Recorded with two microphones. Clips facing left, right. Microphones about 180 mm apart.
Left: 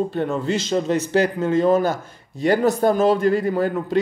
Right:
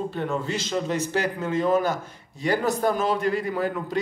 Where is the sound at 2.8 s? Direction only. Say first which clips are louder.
Left 6 dB; 40° left (ahead or behind).